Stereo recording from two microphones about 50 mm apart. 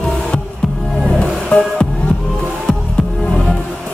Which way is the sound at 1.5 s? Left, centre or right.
Left.